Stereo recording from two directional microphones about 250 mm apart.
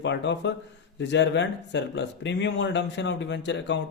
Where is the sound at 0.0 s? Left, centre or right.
Left.